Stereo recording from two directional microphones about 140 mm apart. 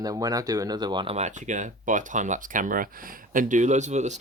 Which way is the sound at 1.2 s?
60° right (ahead or behind).